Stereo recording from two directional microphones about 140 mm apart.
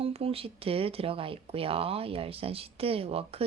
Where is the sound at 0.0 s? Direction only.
45° right (ahead or behind).